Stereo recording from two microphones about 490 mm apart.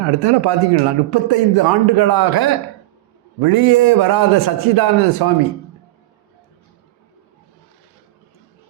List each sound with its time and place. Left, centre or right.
0.2 s a man's voice: right